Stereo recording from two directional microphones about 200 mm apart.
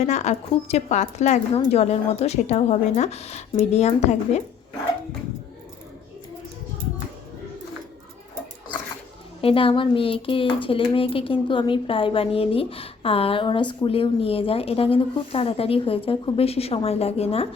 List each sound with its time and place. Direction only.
0.0 s a woman's voice: 35° left (ahead or behind)
9.4 s a woman's voice: 25° left (ahead or behind)